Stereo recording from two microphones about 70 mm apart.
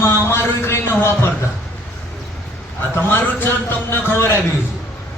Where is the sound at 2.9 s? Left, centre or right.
Left.